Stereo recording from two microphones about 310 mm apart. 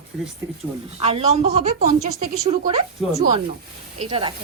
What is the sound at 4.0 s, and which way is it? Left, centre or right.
Speech, centre.